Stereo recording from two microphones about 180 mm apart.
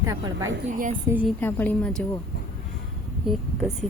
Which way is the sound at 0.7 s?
45° right (ahead or behind).